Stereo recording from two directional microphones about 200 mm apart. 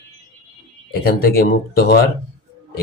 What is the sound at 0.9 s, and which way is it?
Speech, 50° left (ahead or behind).